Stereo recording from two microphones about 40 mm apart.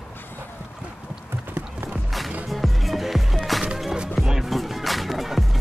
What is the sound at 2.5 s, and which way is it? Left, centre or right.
Music, centre.